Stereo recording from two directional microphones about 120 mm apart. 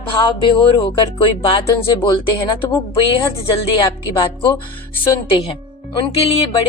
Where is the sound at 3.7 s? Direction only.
40° left (ahead or behind).